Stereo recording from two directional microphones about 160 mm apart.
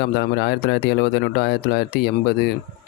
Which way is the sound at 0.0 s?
90° left.